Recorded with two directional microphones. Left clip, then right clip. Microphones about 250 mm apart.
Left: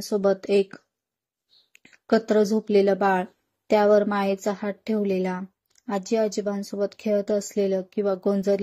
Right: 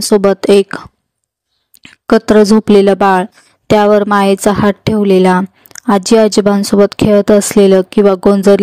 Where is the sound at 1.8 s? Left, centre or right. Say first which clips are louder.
Right 12 dB; right.